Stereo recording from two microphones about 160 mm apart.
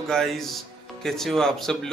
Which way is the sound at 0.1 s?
Centre (ahead or behind).